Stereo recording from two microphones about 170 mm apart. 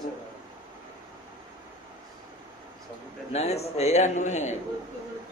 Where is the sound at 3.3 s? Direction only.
40° left (ahead or behind).